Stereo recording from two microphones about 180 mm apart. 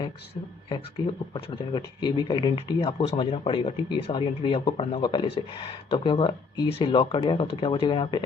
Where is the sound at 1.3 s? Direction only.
30° left (ahead or behind).